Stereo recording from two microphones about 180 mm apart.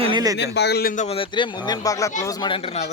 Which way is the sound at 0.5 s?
65° left (ahead or behind).